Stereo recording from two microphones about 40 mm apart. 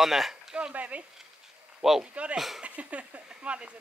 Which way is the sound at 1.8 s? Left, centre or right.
Centre.